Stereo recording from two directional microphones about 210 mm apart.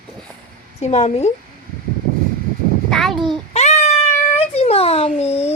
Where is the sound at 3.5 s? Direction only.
30° left (ahead or behind).